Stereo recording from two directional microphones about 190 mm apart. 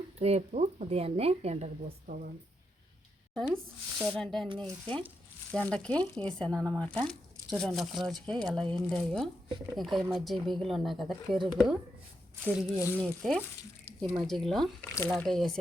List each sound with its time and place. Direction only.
0.2 s speech: 35° right (ahead or behind)
3.4 s speech: centre (ahead or behind)
13.0 s speech: 5° left (ahead or behind)